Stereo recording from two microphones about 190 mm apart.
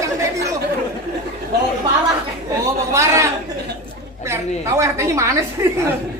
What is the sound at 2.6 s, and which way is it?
A woman's voice, 15° right (ahead or behind).